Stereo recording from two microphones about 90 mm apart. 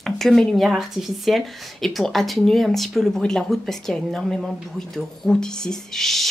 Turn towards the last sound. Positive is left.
turn(degrees=5)  # may be behind; listen again after turning